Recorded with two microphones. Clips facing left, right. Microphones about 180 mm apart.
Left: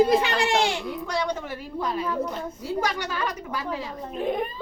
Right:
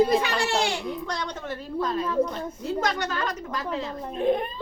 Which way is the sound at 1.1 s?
10° left (ahead or behind).